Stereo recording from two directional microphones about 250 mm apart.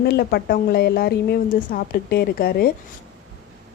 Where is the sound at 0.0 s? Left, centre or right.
Left.